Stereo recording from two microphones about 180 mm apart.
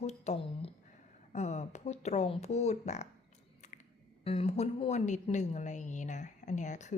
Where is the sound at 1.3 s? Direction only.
40° left (ahead or behind).